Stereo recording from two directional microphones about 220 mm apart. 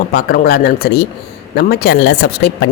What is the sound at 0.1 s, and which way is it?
Speech, 45° left (ahead or behind).